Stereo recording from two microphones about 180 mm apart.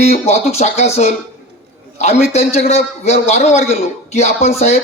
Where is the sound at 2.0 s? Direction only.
40° left (ahead or behind).